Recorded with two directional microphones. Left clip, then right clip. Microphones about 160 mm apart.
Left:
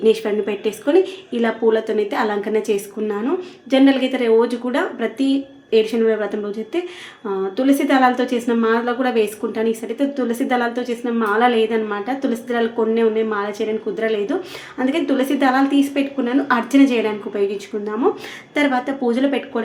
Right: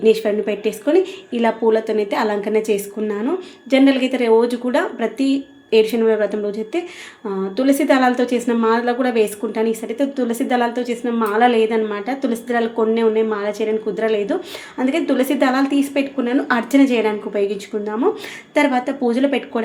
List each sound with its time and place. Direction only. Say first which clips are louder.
0.0 s a woman's voice: right 1 dB; 15° right (ahead or behind)
18.5 s speech: right 2 dB; 15° right (ahead or behind)